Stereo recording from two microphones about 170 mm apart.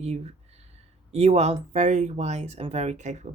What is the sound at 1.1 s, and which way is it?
Speech, 40° right (ahead or behind).